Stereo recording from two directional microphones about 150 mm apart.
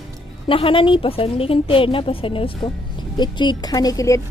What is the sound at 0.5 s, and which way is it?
A woman's voice, 35° left (ahead or behind).